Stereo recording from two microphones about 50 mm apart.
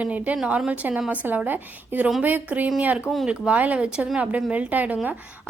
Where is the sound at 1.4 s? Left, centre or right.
Right.